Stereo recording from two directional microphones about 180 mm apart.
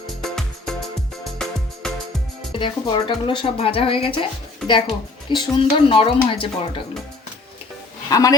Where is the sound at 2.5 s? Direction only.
25° left (ahead or behind).